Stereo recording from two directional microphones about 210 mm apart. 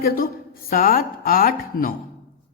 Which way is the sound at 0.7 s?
40° left (ahead or behind).